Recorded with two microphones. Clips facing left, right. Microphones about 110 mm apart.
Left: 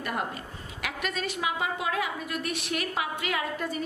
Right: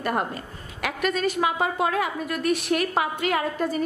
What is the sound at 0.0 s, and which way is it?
A woman's voice, 45° right (ahead or behind).